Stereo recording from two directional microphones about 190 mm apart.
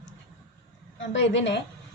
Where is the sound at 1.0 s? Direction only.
75° left (ahead or behind).